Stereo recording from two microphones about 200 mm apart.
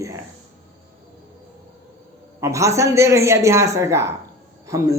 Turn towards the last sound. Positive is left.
turn(degrees=-15)  # may be behind; listen again after turning